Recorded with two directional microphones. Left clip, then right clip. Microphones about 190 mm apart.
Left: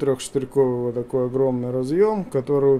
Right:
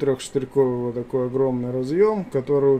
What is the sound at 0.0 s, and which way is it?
Speech, 5° left (ahead or behind).